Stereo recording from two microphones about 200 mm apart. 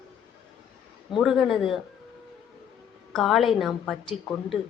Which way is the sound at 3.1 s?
Centre (ahead or behind).